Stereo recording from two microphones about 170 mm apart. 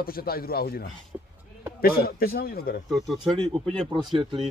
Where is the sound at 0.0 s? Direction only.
60° left (ahead or behind).